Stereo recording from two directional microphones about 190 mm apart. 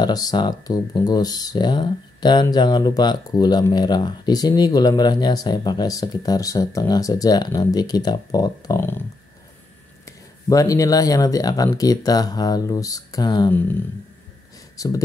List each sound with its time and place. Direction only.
0.0 s speech: 20° left (ahead or behind)
10.0 s speech: 20° left (ahead or behind)
13.5 s speech: 10° left (ahead or behind)
14.8 s speech: 20° left (ahead or behind)